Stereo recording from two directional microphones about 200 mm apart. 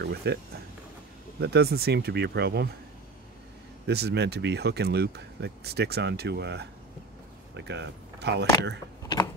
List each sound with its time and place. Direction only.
0.0 s speech: 55° right (ahead or behind)
1.4 s speech: 55° right (ahead or behind)
3.8 s speech: 55° right (ahead or behind)